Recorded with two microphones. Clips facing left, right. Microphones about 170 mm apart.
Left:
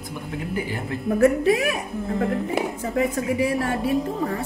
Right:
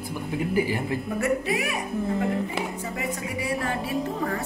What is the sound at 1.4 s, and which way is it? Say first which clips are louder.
Speech: left 7 dB; 90° left.